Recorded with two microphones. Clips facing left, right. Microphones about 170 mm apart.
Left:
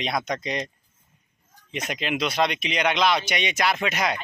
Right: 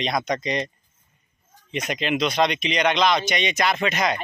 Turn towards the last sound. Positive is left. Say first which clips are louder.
# right 2 dB
turn(degrees=10)  # may be behind; listen again after turning